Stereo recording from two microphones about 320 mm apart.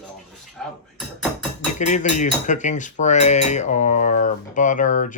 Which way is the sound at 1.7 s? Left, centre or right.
Left.